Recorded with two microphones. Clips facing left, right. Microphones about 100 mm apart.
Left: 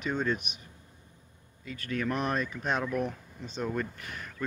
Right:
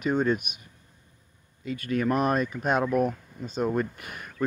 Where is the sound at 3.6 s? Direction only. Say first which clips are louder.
Right 6 dB; 20° right (ahead or behind).